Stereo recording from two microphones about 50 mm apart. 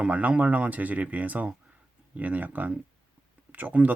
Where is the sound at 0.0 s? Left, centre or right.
Right.